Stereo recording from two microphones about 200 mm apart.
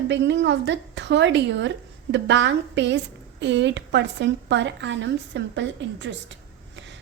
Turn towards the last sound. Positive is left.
turn(degrees=-60)  # may be behind; listen again after turning